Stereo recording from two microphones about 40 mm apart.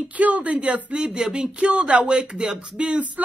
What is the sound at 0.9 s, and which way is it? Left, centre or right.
Speech, right.